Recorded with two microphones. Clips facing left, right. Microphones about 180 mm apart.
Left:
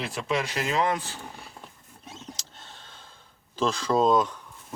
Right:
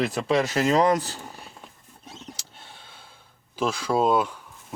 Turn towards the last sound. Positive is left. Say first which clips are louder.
# even
turn(degrees=-10)  # may be behind; listen again after turning